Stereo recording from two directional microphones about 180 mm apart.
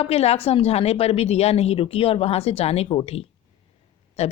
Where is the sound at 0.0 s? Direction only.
35° left (ahead or behind).